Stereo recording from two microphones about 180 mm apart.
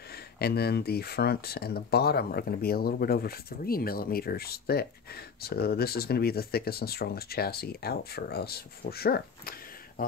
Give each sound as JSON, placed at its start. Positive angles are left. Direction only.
{"t": 0.4, "sound": "speech", "side_deg": 60}